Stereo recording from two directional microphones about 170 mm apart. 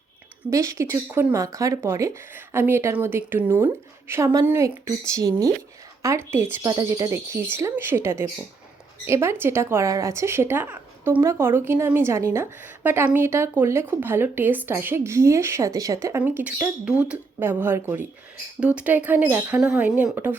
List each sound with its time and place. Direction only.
0.5 s speech: 20° right (ahead or behind)